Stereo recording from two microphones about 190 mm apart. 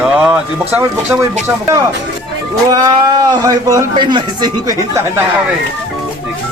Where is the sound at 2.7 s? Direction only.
20° right (ahead or behind).